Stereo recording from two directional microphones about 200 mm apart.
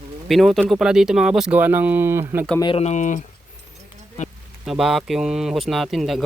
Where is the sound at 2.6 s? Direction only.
30° left (ahead or behind).